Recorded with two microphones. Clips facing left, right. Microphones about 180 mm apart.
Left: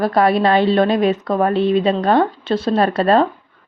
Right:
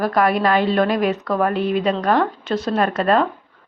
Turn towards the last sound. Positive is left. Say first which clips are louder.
# left 3 dB
turn(degrees=30)  # may be behind; listen again after turning